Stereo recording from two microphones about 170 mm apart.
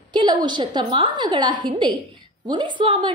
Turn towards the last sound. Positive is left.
turn(degrees=-30)  # may be behind; listen again after turning